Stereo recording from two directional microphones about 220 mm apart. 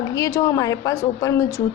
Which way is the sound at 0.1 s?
15° left (ahead or behind).